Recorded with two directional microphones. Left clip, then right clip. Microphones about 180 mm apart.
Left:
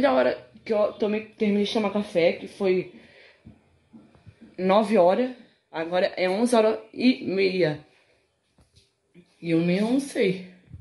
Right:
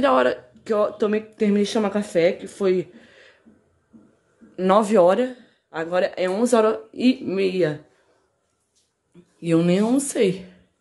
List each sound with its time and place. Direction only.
0.0 s speech: 25° right (ahead or behind)
4.6 s speech: 35° right (ahead or behind)
9.4 s speech: 40° right (ahead or behind)